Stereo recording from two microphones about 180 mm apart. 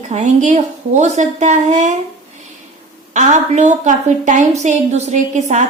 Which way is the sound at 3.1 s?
40° right (ahead or behind).